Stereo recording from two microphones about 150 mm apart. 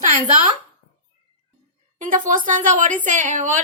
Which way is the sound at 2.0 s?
60° right (ahead or behind).